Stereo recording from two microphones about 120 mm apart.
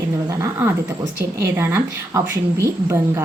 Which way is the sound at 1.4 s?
20° right (ahead or behind).